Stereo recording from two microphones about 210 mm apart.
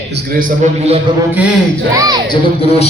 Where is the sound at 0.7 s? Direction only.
30° right (ahead or behind).